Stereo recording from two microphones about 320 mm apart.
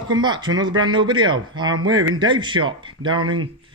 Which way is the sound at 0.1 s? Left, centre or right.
Centre.